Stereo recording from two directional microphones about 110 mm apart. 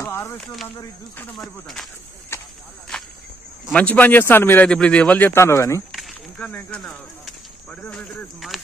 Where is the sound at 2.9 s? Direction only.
5° left (ahead or behind).